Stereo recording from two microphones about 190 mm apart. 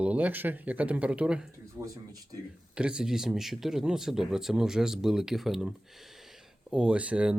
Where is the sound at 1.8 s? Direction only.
20° right (ahead or behind).